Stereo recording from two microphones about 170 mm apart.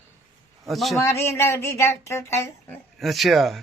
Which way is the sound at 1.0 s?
15° left (ahead or behind).